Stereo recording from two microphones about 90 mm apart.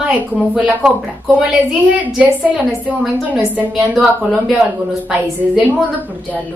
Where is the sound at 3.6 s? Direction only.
5° right (ahead or behind).